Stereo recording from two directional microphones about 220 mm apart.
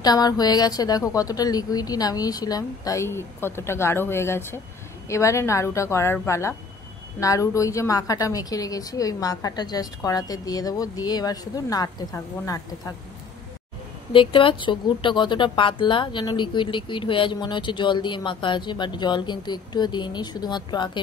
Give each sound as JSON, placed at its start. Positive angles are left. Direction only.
{"t": 0.0, "sound": "a woman's voice", "side_deg": 15}
{"t": 14.1, "sound": "speech", "side_deg": 25}